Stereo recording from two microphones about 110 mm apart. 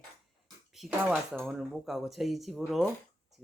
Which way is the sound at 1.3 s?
Centre (ahead or behind).